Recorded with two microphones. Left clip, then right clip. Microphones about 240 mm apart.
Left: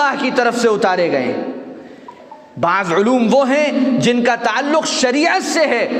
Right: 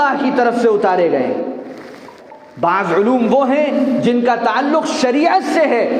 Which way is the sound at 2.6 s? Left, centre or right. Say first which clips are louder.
Right 1 dB; left.